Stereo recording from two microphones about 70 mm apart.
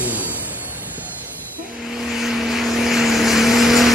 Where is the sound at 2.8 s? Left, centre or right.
Centre.